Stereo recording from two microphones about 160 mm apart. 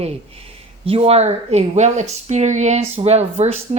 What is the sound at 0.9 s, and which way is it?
Speech, 35° right (ahead or behind).